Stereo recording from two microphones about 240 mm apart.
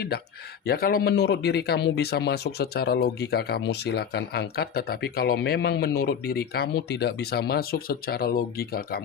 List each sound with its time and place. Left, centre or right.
0.6 s speech: left